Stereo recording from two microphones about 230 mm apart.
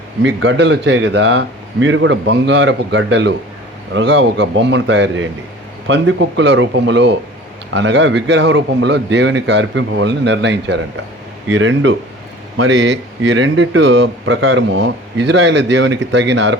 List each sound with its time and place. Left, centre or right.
0.2 s speech: right